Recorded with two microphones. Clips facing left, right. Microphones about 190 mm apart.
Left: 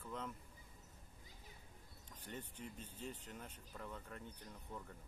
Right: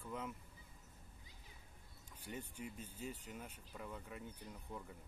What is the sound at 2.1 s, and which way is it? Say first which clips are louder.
Speech: right 2 dB; 10° right (ahead or behind).